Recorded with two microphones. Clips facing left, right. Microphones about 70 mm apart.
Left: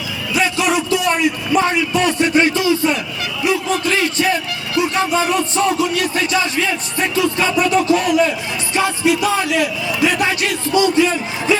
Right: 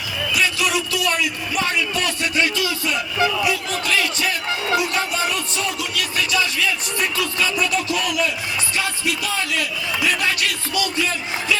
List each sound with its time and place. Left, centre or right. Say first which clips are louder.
0.3 s a sound: left 5 dB; left
4.8 s speech: left 5 dB; left
8.7 s music: left 11 dB; left